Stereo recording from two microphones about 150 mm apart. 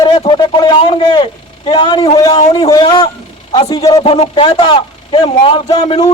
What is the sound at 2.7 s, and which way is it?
Speech, 30° left (ahead or behind).